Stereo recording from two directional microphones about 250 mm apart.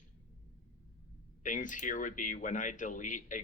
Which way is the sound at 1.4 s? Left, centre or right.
Left.